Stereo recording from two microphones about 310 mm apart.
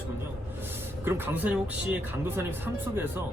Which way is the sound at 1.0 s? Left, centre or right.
Centre.